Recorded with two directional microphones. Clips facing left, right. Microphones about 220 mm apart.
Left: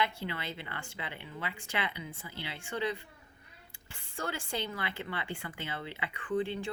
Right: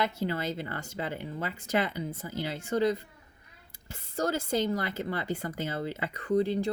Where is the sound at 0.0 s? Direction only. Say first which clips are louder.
Right 5 dB; 40° right (ahead or behind).